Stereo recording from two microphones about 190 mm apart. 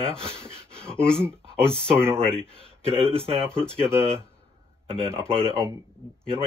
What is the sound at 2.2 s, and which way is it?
Speech, 30° right (ahead or behind).